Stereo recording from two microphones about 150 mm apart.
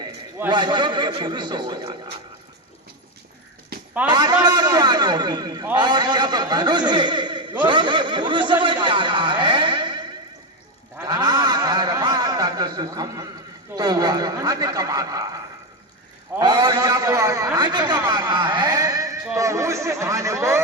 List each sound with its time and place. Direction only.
0.5 s a man's voice: 30° right (ahead or behind)
4.1 s a man's voice: 25° right (ahead or behind)
7.6 s a sound: 30° right (ahead or behind)
11.0 s a sound: 25° right (ahead or behind)
13.7 s a man's voice: 25° right (ahead or behind)
16.4 s a man's voice: 30° right (ahead or behind)